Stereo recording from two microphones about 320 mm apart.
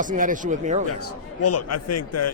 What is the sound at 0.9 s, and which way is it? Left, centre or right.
A man's voice, left.